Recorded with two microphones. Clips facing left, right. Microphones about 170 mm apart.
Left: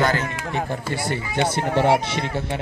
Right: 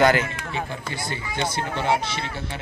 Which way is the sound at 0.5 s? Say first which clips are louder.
Left 5 dB; 75° left (ahead or behind).